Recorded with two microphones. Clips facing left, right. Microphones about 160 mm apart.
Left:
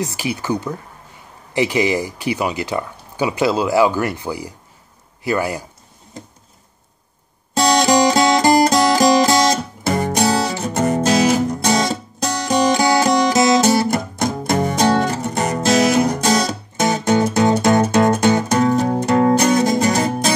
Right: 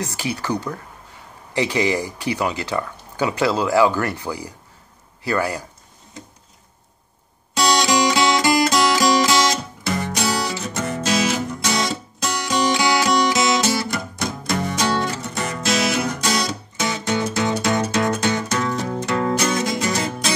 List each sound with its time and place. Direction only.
0.0 s speech: 15° left (ahead or behind)
7.5 s music: 50° left (ahead or behind)